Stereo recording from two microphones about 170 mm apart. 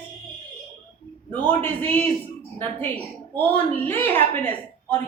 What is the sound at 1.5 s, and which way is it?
Speech, 10° left (ahead or behind).